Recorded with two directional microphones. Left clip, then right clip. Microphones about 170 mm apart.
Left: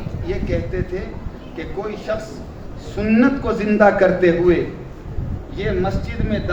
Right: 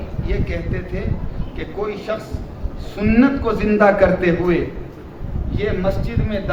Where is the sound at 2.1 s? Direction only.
35° right (ahead or behind).